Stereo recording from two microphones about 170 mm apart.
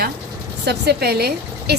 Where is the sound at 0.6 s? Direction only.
75° right (ahead or behind).